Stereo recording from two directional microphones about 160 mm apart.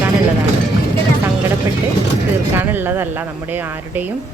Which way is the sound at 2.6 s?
15° right (ahead or behind).